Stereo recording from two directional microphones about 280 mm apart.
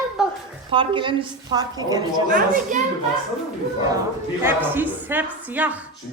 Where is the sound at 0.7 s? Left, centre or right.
Centre.